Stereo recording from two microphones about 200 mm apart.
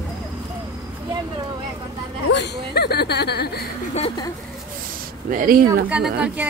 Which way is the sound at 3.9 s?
25° left (ahead or behind).